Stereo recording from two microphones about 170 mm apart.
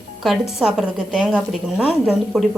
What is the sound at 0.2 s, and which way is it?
A woman's voice, centre (ahead or behind).